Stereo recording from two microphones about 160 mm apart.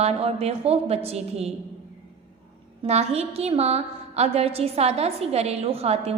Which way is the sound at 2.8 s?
40° right (ahead or behind).